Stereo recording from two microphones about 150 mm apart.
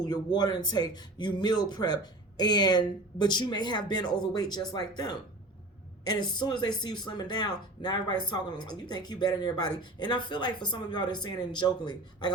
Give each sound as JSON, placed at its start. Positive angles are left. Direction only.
{"t": 0.0, "sound": "speech", "side_deg": 25}